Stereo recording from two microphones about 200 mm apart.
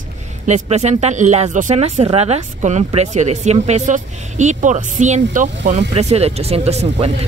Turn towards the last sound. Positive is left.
turn(degrees=-35)  # may be behind; listen again after turning